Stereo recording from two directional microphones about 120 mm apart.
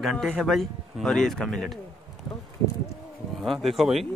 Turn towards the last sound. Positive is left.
turn(degrees=0)  # may be behind; listen again after turning